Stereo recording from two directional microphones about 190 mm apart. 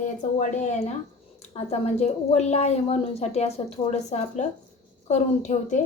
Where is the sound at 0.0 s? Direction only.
40° left (ahead or behind).